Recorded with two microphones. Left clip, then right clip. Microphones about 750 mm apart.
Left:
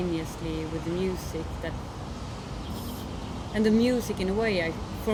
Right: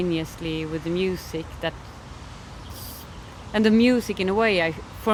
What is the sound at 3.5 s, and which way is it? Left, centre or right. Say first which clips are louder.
Speech: right 5 dB; right.